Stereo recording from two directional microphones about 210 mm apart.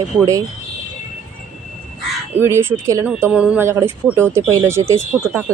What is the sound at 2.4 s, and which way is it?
Speech, 10° right (ahead or behind).